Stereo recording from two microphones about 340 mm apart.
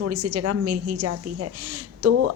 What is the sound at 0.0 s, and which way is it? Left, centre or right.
A woman's voice, right.